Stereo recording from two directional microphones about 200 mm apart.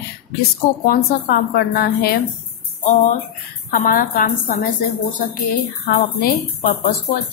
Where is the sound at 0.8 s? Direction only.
50° left (ahead or behind).